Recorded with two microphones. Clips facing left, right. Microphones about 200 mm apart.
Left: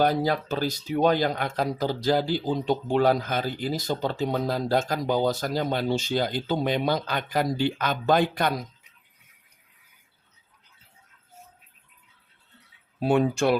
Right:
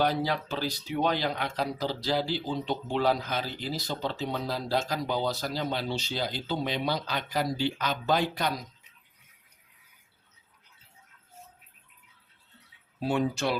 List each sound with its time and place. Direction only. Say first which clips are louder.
0.0 s speech: left 4 dB; 45° left (ahead or behind)
13.0 s speech: left 6 dB; 55° left (ahead or behind)